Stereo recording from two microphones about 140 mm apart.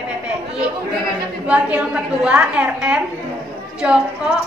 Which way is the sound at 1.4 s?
10° right (ahead or behind).